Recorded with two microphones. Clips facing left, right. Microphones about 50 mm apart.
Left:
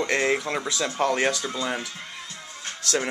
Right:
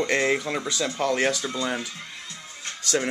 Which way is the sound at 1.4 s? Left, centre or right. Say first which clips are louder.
Right 1 dB; centre.